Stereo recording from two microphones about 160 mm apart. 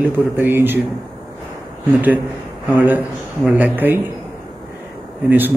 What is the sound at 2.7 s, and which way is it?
A man's voice, 10° right (ahead or behind).